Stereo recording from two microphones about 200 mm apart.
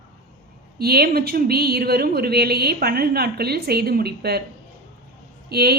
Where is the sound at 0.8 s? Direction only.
50° right (ahead or behind).